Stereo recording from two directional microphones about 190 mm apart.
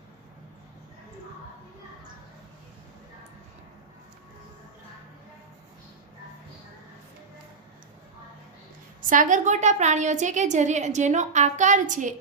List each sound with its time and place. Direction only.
9.0 s a woman's voice: 45° right (ahead or behind)